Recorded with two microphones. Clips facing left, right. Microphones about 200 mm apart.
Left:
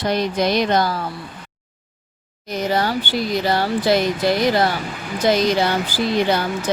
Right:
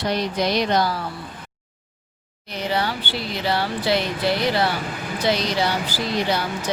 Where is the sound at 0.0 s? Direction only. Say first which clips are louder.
Left 3 dB; 50° left (ahead or behind).